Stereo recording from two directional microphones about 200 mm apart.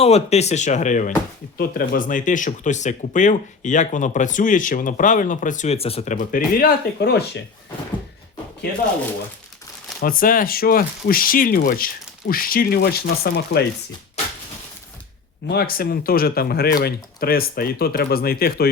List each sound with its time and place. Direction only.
0.0 s speech: 30° left (ahead or behind); by 7.2 s 50° left (ahead or behind)
10.0 s speech: 45° left (ahead or behind)
15.4 s speech: 50° left (ahead or behind)